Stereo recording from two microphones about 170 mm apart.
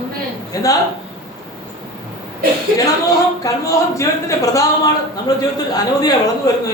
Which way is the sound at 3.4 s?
20° left (ahead or behind).